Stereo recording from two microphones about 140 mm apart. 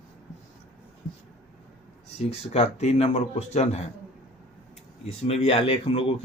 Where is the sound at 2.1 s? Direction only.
50° left (ahead or behind).